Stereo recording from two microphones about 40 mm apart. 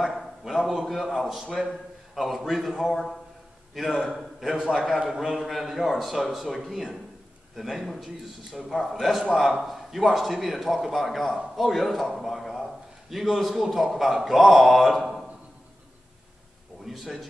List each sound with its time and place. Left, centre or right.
0.0 s a man's voice: centre
2.9 s speech: centre
3.9 s a man's voice: centre
5.7 s a man's voice: centre
16.9 s a man's voice: centre